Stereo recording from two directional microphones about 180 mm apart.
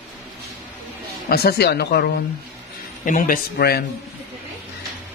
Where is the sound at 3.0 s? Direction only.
50° left (ahead or behind).